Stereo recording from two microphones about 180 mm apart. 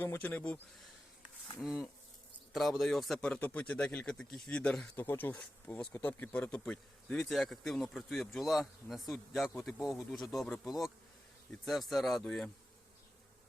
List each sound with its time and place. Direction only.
0.0 s speech: 10° left (ahead or behind)
1.5 s speech: 5° right (ahead or behind)